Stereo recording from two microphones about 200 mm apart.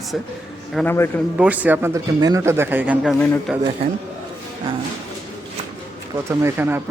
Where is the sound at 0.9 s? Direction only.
10° left (ahead or behind).